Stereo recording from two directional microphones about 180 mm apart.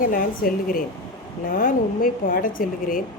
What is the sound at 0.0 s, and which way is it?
Speech, 50° left (ahead or behind).